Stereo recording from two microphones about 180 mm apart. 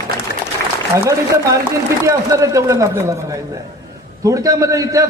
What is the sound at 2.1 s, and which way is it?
A man's voice, 15° right (ahead or behind).